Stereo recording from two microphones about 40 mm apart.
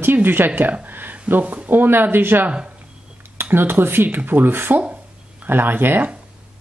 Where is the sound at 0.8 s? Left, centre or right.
Right.